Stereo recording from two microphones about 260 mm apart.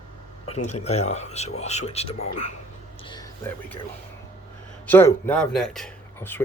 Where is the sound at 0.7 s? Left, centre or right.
Left.